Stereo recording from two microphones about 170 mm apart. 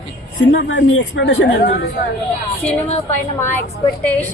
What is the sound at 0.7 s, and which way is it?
Speech, 90° left.